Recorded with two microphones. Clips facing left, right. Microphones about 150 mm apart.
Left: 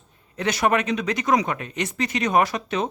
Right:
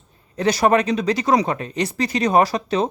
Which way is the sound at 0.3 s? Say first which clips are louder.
Right 5 dB; 35° right (ahead or behind).